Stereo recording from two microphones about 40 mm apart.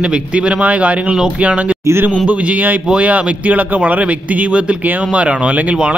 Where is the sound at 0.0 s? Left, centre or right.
Right.